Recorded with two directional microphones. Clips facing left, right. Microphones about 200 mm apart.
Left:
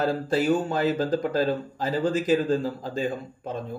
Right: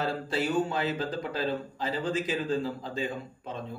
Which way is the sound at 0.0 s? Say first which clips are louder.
Left 6 dB; 45° left (ahead or behind).